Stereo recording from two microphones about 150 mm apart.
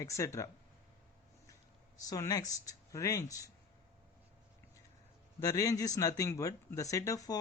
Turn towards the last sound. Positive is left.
turn(degrees=20)  # may be behind; listen again after turning